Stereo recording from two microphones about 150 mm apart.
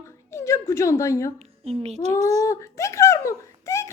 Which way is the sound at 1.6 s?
45° right (ahead or behind).